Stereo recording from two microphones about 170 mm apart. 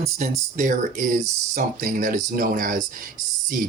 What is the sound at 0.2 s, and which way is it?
Speech, 50° right (ahead or behind).